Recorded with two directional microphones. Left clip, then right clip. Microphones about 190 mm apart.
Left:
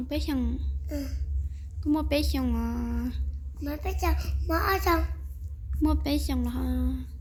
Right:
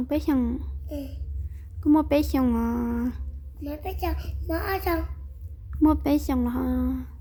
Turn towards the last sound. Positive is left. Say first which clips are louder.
# right 5 dB
turn(degrees=-35)  # may be behind; listen again after turning